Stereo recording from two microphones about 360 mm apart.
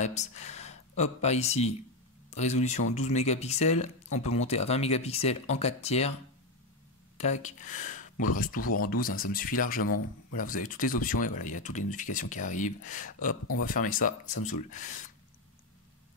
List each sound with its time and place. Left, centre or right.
0.0 s speech: centre
7.2 s speech: centre